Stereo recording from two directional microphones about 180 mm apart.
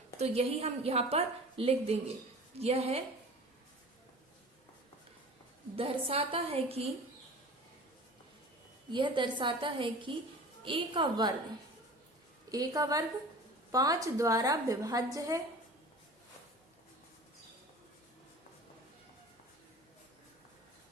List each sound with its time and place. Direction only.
0.2 s a woman's voice: 35° right (ahead or behind)
5.7 s a woman's voice: 30° right (ahead or behind)
8.9 s a woman's voice: 25° right (ahead or behind)
12.5 s a woman's voice: 20° right (ahead or behind)